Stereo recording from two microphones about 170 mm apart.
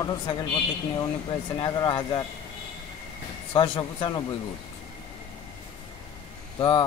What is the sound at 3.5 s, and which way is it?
Speech, 30° left (ahead or behind).